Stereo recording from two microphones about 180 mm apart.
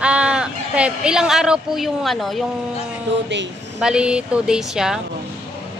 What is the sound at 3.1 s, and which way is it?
Speech, 80° right.